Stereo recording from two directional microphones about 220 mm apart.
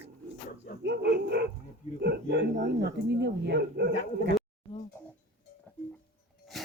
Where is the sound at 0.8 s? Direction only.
50° right (ahead or behind).